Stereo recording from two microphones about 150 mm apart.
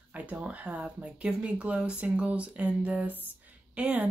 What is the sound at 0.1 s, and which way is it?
Speech, 10° right (ahead or behind).